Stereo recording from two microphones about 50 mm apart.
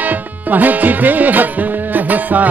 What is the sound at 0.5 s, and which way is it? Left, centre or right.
Music, right.